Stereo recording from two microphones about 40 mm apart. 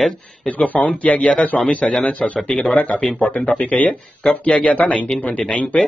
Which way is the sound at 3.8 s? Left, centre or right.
Left.